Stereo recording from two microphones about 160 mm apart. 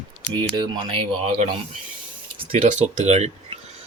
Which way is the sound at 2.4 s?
45° right (ahead or behind).